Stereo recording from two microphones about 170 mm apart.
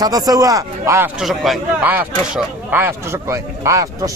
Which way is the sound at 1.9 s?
10° right (ahead or behind).